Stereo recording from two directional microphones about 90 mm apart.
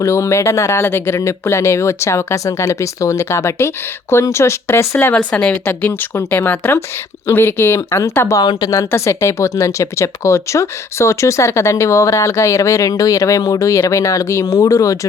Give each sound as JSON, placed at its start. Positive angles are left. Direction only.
{"t": 0.0, "sound": "speech", "side_deg": 35}
{"t": 5.1, "sound": "speech", "side_deg": 10}
{"t": 8.4, "sound": "speech", "side_deg": 45}